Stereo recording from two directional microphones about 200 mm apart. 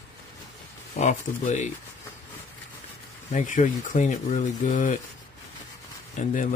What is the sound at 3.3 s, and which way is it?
Speech, 40° left (ahead or behind).